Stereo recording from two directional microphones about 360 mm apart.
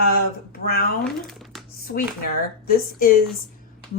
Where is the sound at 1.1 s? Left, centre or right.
Centre.